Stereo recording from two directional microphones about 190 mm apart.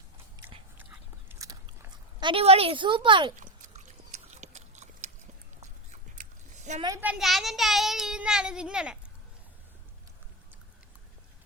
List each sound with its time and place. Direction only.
0.8 s biting: 10° right (ahead or behind)
2.2 s speech: 30° right (ahead or behind)
3.3 s a sound: 40° right (ahead or behind)
5.9 s biting: 40° right (ahead or behind)
6.8 s speech: 15° right (ahead or behind)